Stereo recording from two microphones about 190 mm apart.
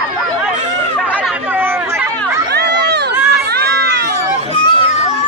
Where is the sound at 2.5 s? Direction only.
60° right (ahead or behind).